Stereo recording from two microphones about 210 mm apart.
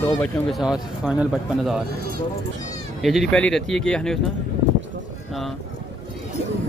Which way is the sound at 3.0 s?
Centre (ahead or behind).